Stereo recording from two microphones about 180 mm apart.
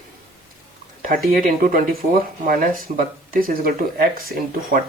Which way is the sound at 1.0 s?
50° right (ahead or behind).